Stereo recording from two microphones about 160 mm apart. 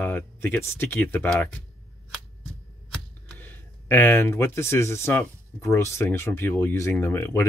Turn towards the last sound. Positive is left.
turn(degrees=15)  # may be behind; listen again after turning